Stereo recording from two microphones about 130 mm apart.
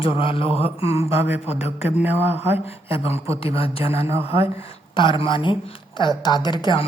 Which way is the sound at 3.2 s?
45° left (ahead or behind).